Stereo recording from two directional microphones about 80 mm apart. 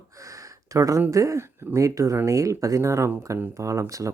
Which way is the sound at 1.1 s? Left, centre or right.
Right.